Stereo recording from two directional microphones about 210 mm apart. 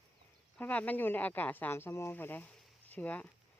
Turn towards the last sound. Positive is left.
turn(degrees=10)  # may be behind; listen again after turning